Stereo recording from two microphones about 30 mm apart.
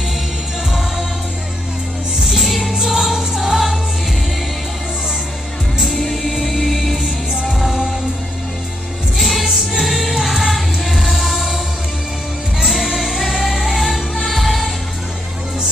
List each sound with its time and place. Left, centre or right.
2.2 s music: centre
2.7 s music: centre
6.0 s music: centre
9.2 s music: centre
12.5 s music: centre